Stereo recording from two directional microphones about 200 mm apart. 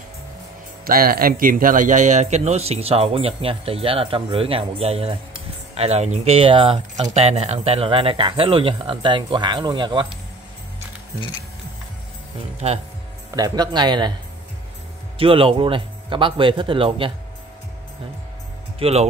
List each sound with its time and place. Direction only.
0.8 s a man's voice: 45° right (ahead or behind); by 10.1 s 25° right (ahead or behind)
12.5 s speech: 30° right (ahead or behind)
13.3 s speech: 20° right (ahead or behind)
15.1 s speech: 25° right (ahead or behind)
18.8 s speech: 30° right (ahead or behind)